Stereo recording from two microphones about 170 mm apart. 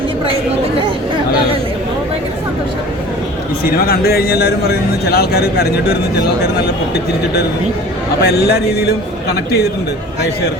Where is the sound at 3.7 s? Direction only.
65° left (ahead or behind).